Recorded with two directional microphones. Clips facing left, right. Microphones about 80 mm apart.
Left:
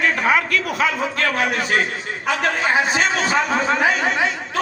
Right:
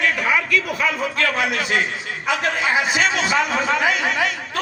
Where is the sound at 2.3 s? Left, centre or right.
Left.